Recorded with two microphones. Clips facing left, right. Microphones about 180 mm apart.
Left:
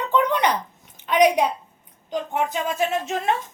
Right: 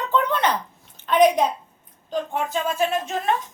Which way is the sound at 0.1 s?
15° left (ahead or behind).